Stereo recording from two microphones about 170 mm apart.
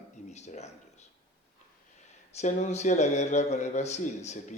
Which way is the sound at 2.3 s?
45° left (ahead or behind).